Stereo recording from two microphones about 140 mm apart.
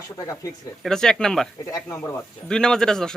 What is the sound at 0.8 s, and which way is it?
Speech, 5° left (ahead or behind).